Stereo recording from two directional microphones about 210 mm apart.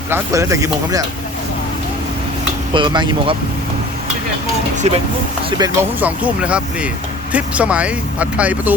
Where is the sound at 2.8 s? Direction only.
20° right (ahead or behind).